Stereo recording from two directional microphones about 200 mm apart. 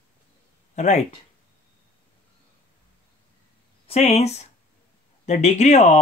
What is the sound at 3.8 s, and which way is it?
Speech, 30° left (ahead or behind).